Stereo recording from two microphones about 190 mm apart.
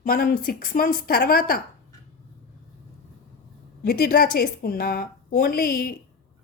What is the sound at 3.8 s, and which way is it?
A woman's voice, 55° left (ahead or behind).